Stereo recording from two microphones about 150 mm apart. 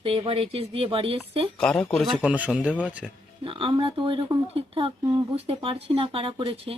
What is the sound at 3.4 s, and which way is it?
Speech, 35° right (ahead or behind).